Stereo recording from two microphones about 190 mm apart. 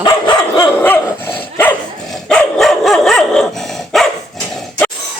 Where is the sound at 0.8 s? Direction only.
10° left (ahead or behind).